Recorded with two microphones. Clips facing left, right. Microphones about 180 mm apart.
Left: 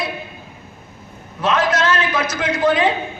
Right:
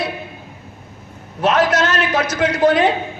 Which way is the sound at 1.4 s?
40° right (ahead or behind).